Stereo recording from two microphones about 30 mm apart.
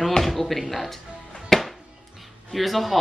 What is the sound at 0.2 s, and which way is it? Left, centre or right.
Speech, centre.